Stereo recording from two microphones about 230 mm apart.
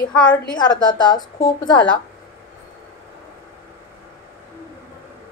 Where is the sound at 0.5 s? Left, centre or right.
Centre.